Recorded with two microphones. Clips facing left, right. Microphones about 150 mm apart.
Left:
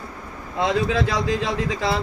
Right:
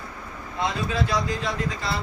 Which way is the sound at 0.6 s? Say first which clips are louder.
Left 5 dB; 90° left.